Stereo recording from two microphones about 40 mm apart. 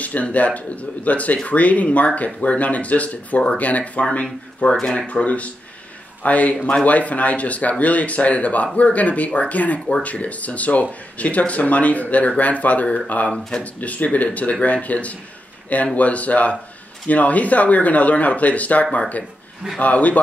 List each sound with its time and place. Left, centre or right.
0.0 s speech: left